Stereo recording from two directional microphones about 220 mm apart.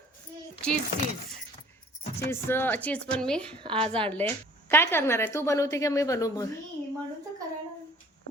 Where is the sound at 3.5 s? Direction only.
25° right (ahead or behind).